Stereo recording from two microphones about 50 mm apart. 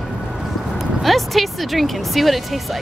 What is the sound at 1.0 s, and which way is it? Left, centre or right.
Speech, centre.